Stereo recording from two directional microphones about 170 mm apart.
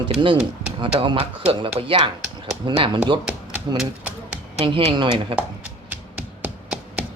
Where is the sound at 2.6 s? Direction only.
30° right (ahead or behind).